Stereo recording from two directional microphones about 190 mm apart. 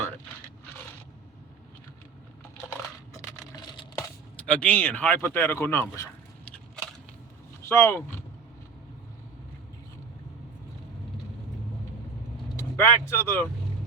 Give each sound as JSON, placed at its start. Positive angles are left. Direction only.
{"t": 3.1, "sound": "a sound", "side_deg": 20}
{"t": 4.4, "sound": "speech", "side_deg": 5}
{"t": 7.6, "sound": "speech", "side_deg": 15}
{"t": 12.5, "sound": "speech", "side_deg": 15}